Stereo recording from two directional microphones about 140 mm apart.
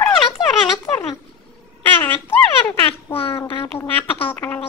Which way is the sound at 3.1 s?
40° left (ahead or behind).